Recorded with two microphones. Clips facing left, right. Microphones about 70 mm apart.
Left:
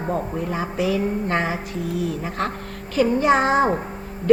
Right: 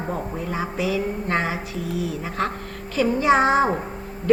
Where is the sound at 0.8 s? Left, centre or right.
Left.